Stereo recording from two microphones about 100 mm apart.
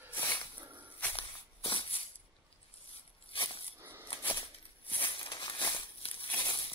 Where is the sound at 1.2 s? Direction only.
65° left (ahead or behind).